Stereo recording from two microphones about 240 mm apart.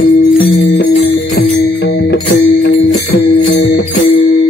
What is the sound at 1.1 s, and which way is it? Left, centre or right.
Jingle bell, left.